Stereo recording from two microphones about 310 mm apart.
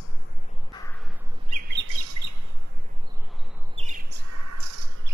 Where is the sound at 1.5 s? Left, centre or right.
Right.